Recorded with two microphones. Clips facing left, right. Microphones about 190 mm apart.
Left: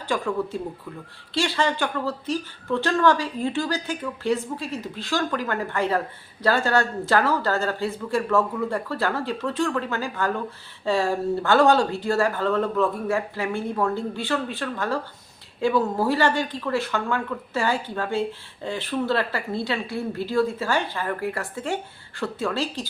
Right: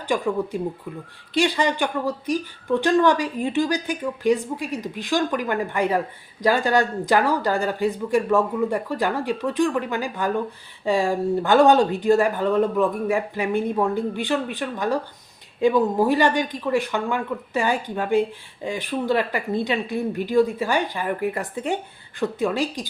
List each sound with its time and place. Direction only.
0.1 s speech: 15° right (ahead or behind)